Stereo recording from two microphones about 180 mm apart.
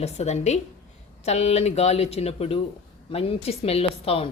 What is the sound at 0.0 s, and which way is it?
Speech, 35° left (ahead or behind).